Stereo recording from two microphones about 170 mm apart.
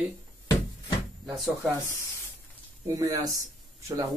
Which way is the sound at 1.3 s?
Centre (ahead or behind).